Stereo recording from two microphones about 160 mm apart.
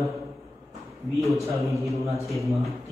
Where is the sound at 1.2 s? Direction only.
Centre (ahead or behind).